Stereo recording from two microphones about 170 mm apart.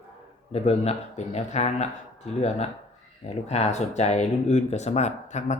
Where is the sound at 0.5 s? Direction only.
40° left (ahead or behind).